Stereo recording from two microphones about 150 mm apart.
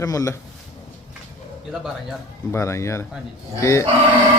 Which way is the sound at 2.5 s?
20° left (ahead or behind).